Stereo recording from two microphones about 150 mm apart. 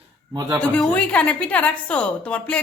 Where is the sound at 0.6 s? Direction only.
10° left (ahead or behind).